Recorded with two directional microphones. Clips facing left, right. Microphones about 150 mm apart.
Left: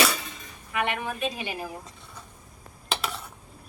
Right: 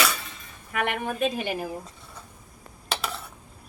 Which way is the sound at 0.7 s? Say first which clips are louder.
Right 1 dB; 50° right (ahead or behind).